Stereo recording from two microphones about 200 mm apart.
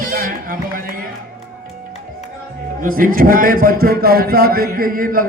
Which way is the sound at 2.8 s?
45° right (ahead or behind).